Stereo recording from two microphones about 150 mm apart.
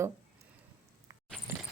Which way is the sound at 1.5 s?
15° right (ahead or behind).